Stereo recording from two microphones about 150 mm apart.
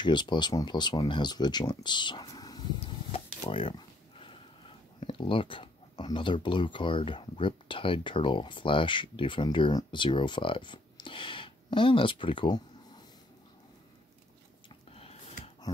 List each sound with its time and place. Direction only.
0.0 s speech: 30° left (ahead or behind)
2.8 s speech: 40° left (ahead or behind)
14.9 s a sound: 40° left (ahead or behind)